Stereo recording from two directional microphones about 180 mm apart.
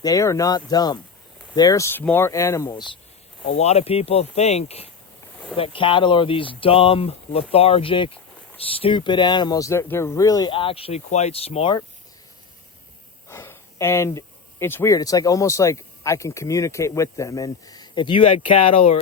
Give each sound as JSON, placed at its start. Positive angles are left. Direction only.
{"t": 0.0, "sound": "speech", "side_deg": 20}
{"t": 3.5, "sound": "speech", "side_deg": 35}
{"t": 13.2, "sound": "speech", "side_deg": 15}